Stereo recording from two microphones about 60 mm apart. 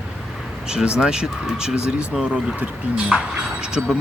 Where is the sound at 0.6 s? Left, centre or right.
Centre.